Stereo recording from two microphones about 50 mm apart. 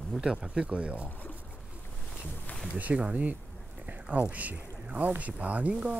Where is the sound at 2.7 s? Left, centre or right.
Right.